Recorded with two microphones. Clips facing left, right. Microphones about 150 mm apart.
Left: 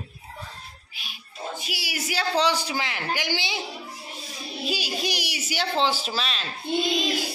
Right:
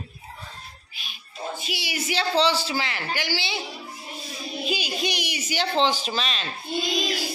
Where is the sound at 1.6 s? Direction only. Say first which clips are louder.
Right 2 dB; 5° left (ahead or behind).